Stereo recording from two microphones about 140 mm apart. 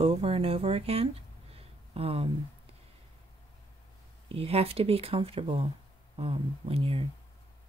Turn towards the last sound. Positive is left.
turn(degrees=-40)  # may be behind; listen again after turning